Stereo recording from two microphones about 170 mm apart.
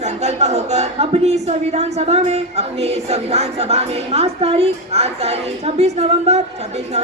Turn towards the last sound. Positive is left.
turn(degrees=-40)  # may be behind; listen again after turning